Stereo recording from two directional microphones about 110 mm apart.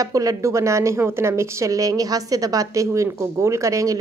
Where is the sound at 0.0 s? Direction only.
30° right (ahead or behind).